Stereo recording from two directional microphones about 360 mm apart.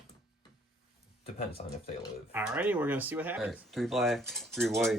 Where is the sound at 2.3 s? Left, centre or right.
Centre.